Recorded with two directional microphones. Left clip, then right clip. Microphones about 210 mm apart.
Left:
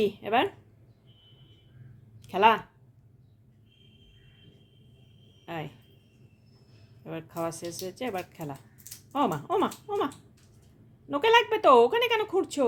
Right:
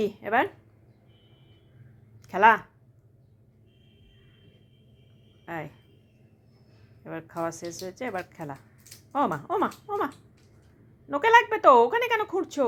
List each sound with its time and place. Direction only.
0.0 s a woman's voice: centre (ahead or behind)
2.2 s speech: centre (ahead or behind)
7.0 s a woman's voice: 5° left (ahead or behind)
11.1 s a woman's voice: centre (ahead or behind)